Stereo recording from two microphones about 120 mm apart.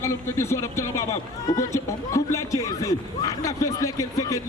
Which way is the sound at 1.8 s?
25° left (ahead or behind).